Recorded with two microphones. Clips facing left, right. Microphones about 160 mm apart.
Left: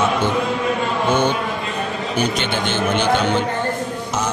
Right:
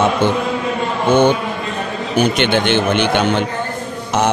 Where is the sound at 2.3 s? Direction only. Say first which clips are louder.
Right 6 dB; 70° right (ahead or behind).